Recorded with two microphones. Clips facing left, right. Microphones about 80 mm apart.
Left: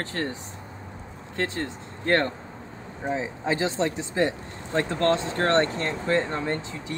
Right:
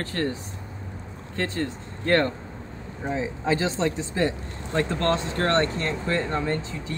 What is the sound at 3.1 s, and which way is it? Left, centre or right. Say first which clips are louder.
Speech: right 2 dB; left.